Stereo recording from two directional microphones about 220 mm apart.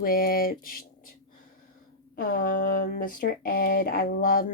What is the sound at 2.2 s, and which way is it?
Speech, 40° left (ahead or behind).